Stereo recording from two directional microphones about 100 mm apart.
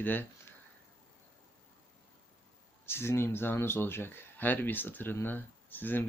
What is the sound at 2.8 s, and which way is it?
Speech, 25° left (ahead or behind).